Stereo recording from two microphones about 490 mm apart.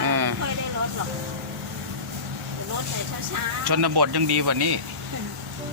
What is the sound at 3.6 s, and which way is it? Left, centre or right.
Speech, right.